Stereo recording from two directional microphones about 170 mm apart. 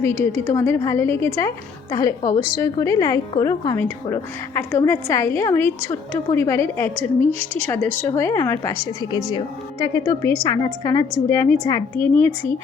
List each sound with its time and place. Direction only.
0.0 s a woman's voice: 15° left (ahead or behind)